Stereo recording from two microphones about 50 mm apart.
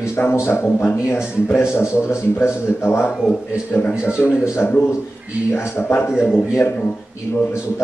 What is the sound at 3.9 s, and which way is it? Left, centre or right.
Speech, centre.